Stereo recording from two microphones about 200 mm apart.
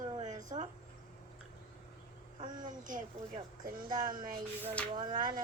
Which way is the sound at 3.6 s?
45° right (ahead or behind).